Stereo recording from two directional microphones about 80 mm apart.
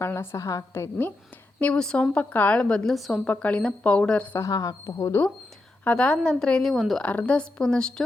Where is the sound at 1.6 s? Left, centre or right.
Centre.